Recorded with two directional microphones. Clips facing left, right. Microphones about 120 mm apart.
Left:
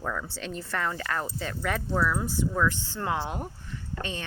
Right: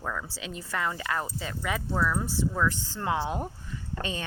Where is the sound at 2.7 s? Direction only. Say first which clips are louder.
Even; 40° right (ahead or behind).